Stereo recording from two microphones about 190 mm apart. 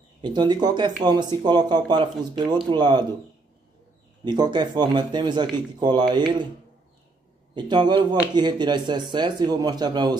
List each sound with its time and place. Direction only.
0.2 s speech: 25° right (ahead or behind)
4.2 s speech: 25° right (ahead or behind)
7.5 s speech: 25° right (ahead or behind)